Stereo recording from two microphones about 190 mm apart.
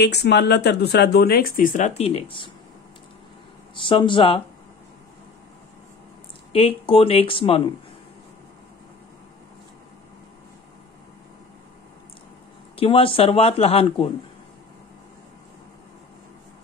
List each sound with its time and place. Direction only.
0.0 s speech: 60° left (ahead or behind); by 2.5 s 25° left (ahead or behind)
3.7 s speech: 25° left (ahead or behind)
6.5 s speech: 30° left (ahead or behind)
12.7 s speech: 30° left (ahead or behind)